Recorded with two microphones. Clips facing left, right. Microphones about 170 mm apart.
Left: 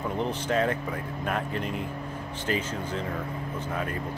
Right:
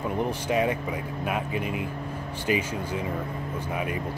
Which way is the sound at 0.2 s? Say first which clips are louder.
Right 1 dB; 10° right (ahead or behind).